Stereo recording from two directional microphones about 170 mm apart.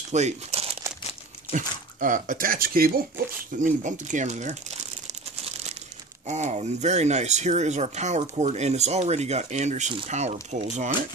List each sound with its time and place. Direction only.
0.1 s speech: 40° right (ahead or behind)
1.5 s speech: 50° right (ahead or behind)
3.6 s speech: 50° right (ahead or behind)
6.2 s speech: 40° right (ahead or behind)